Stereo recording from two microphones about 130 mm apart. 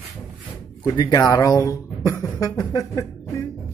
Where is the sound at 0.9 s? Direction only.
30° left (ahead or behind).